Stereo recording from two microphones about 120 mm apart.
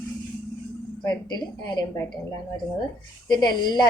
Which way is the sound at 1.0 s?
35° left (ahead or behind).